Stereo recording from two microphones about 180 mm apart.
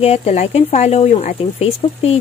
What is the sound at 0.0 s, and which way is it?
Speech, 35° left (ahead or behind).